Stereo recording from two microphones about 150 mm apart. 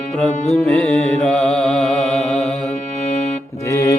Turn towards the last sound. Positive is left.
turn(degrees=20)  # may be behind; listen again after turning